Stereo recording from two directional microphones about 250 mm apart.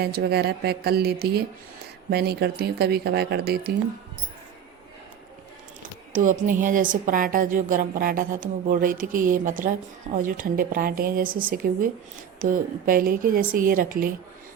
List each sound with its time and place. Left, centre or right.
0.0 s a woman's voice: right
5.8 s a woman's voice: right